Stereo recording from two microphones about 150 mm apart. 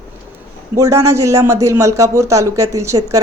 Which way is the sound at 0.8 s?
20° right (ahead or behind).